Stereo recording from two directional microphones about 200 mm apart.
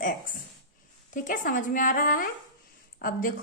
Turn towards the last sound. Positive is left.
turn(degrees=45)  # may be behind; listen again after turning